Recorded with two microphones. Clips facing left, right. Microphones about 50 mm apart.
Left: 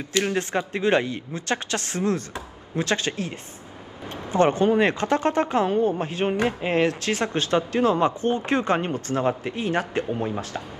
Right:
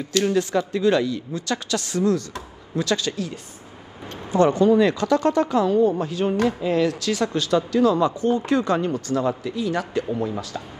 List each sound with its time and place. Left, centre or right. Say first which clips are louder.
0.2 s speech: right 4 dB; left